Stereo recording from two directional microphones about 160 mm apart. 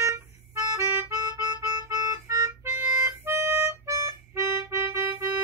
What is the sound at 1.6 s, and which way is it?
Music, 15° right (ahead or behind).